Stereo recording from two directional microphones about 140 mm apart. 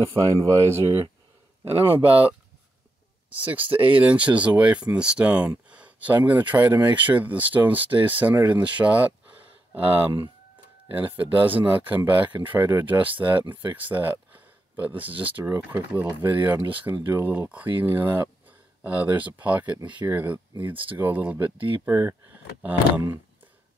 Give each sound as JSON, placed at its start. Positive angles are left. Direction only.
{"t": 0.1, "sound": "speech", "side_deg": -25}
{"t": 3.3, "sound": "speech", "side_deg": -10}
{"t": 5.7, "sound": "a sound", "side_deg": -10}
{"t": 6.8, "sound": "speech", "side_deg": -10}
{"t": 11.3, "sound": "speech", "side_deg": -10}